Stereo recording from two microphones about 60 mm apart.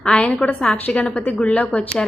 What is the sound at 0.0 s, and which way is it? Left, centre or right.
A woman's voice, centre.